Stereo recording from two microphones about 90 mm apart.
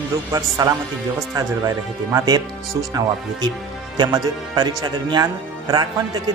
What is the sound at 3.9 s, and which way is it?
Speech, 50° right (ahead or behind).